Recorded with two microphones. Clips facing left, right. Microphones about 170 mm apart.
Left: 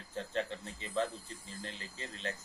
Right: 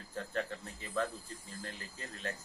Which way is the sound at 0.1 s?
25° left (ahead or behind).